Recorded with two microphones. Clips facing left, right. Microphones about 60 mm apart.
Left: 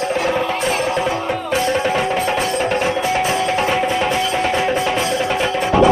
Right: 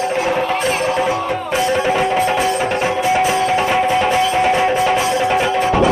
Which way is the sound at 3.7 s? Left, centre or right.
Centre.